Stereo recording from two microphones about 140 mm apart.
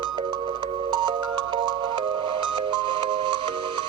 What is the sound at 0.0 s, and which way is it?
Music, 35° right (ahead or behind).